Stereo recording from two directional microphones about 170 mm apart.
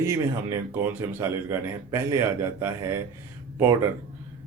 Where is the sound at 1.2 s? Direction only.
15° right (ahead or behind).